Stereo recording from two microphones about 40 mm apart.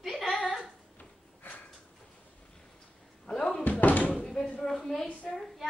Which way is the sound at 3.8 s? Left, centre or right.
Left.